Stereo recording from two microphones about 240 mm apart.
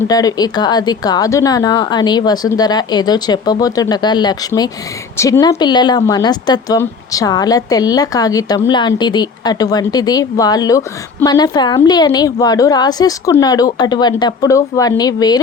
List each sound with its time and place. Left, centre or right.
0.1 s a woman's voice: centre